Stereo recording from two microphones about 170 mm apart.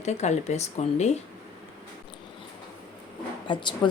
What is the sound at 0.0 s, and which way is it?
A woman's voice, 40° left (ahead or behind).